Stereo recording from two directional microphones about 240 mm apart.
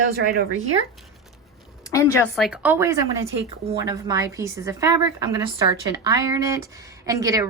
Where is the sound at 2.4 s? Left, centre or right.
Centre.